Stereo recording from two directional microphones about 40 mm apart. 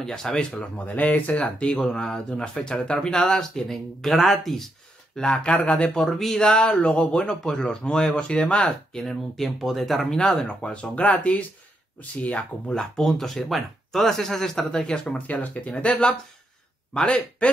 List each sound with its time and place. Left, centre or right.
0.0 s speech: centre
0.7 s speech: left
1.6 s speech: centre
5.1 s speech: left
5.9 s speech: centre
6.4 s speech: left
8.9 s speech: centre
10.0 s speech: centre
10.4 s speech: left
12.7 s speech: centre
15.1 s speech: left
15.7 s speech: left